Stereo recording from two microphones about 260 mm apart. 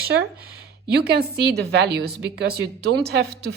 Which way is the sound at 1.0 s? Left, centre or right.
Right.